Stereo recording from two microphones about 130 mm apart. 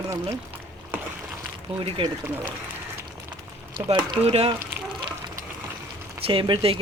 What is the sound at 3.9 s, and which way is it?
Speech, 40° right (ahead or behind).